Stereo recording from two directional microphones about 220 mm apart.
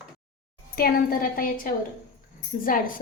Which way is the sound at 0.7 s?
40° left (ahead or behind).